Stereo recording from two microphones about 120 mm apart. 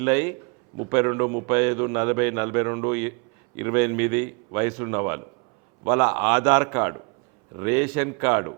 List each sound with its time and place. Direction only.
0.0 s a man's voice: 20° right (ahead or behind)